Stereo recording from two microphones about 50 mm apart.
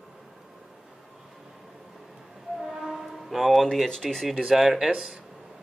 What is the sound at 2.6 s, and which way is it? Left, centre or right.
Music, centre.